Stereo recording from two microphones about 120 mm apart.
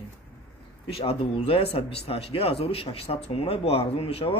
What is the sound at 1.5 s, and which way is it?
Speech, 50° left (ahead or behind).